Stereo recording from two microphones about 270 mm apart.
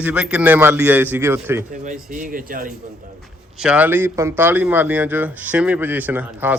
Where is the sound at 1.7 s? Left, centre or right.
Right.